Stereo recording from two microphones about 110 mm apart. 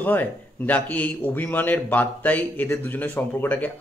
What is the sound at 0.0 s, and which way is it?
Speech, 15° left (ahead or behind).